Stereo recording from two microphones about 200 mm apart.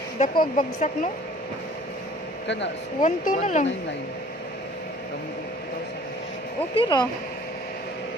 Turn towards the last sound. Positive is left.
turn(degrees=20)  # may be behind; listen again after turning